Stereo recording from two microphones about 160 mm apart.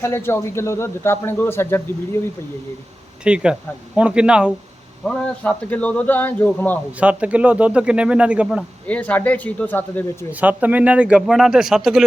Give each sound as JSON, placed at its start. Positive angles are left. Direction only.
{"t": 0.0, "sound": "a man's voice", "side_deg": 15}
{"t": 3.2, "sound": "speech", "side_deg": -5}
{"t": 5.0, "sound": "a man's voice", "side_deg": 5}
{"t": 7.0, "sound": "speech", "side_deg": -10}
{"t": 8.9, "sound": "a man's voice", "side_deg": 10}
{"t": 10.4, "sound": "speech", "side_deg": -10}